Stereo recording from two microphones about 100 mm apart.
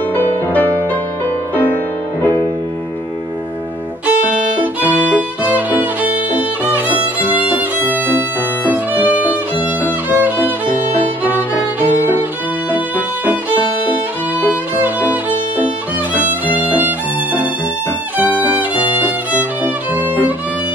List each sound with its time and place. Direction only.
0.1 s music: 15° left (ahead or behind)
4.0 s violin: 15° right (ahead or behind)
9.8 s music: 15° right (ahead or behind)
11.9 s music: 20° right (ahead or behind)
14.5 s violin: 15° right (ahead or behind)